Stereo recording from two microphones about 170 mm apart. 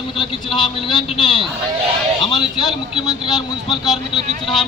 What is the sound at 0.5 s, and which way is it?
Speech, 25° left (ahead or behind).